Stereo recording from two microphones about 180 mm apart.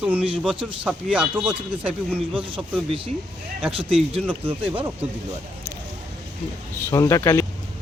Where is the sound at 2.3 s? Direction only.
30° right (ahead or behind).